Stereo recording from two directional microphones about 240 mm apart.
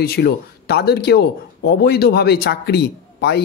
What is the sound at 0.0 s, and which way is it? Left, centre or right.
A man's voice, left.